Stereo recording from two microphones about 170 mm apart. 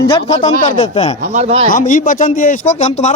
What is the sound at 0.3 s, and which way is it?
Speech, 45° left (ahead or behind).